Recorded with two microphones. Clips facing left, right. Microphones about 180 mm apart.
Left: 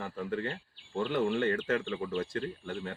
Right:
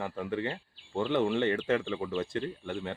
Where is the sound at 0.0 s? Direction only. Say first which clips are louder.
Right 2 dB; 20° right (ahead or behind).